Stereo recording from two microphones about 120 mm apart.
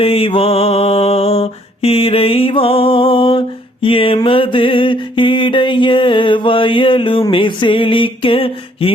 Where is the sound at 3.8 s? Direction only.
50° left (ahead or behind).